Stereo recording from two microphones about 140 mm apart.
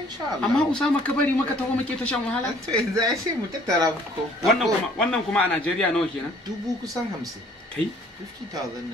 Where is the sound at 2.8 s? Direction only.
25° right (ahead or behind).